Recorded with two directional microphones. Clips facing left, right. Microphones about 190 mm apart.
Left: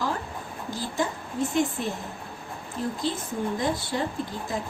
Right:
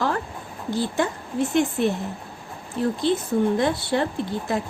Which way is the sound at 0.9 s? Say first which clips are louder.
Right 4 dB; 70° right (ahead or behind).